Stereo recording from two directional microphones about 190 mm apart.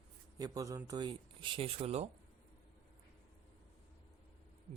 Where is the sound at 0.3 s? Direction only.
20° right (ahead or behind).